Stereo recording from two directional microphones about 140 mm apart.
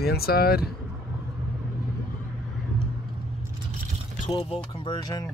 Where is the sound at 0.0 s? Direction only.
90° left.